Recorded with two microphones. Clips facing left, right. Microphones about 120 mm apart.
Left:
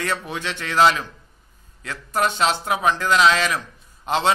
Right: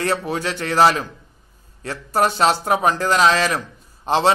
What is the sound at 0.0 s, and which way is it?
A man's voice, 35° right (ahead or behind).